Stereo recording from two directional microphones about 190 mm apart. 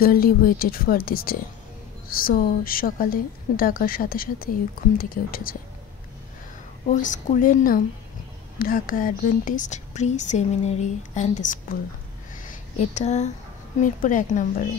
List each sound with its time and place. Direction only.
0.0 s a woman's voice: 50° left (ahead or behind)
6.9 s a woman's voice: 45° left (ahead or behind)